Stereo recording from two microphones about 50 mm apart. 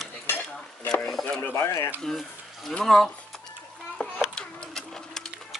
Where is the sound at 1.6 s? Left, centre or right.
Left.